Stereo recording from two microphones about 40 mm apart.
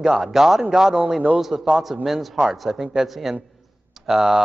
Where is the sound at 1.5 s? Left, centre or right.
Right.